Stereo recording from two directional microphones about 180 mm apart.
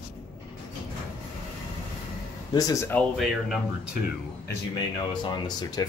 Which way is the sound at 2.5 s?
20° left (ahead or behind).